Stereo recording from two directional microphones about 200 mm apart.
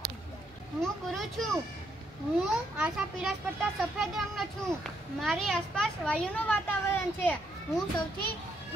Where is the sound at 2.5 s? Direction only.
5° right (ahead or behind).